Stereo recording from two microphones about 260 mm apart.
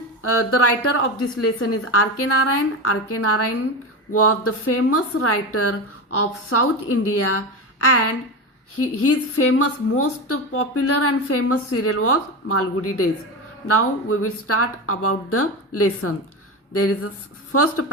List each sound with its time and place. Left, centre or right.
0.3 s speech: left
8.8 s speech: left